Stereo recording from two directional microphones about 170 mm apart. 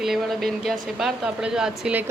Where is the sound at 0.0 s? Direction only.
Centre (ahead or behind).